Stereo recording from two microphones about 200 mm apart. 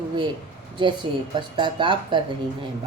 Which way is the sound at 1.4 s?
25° right (ahead or behind).